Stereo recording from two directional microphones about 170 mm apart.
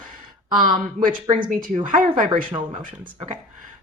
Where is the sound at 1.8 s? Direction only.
55° right (ahead or behind).